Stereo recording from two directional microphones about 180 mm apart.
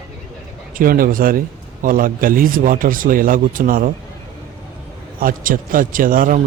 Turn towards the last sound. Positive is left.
turn(degrees=-50)  # may be behind; listen again after turning